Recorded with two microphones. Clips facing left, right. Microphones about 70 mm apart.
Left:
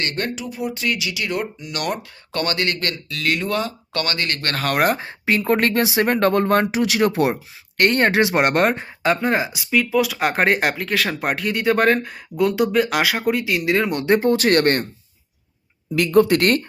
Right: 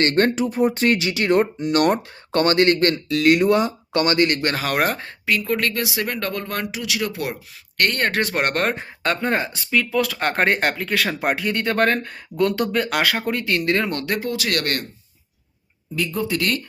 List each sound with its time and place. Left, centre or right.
0.0 s speech: right
4.4 s speech: centre
5.2 s speech: left
7.8 s speech: centre
14.0 s speech: left
16.0 s speech: left